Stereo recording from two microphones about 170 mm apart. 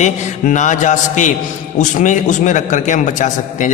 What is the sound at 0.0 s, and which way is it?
A man's voice, 45° left (ahead or behind).